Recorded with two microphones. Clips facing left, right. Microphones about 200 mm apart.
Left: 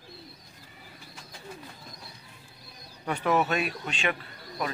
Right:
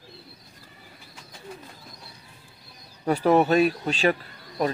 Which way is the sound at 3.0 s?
35° right (ahead or behind).